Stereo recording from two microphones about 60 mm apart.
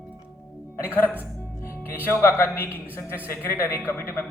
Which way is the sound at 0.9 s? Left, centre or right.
Left.